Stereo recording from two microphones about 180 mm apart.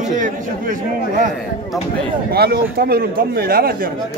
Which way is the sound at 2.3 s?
60° right (ahead or behind).